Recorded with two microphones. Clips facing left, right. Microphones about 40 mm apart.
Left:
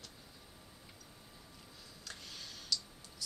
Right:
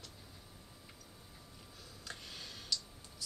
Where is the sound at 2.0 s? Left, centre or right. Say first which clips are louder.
Right 1 dB; right.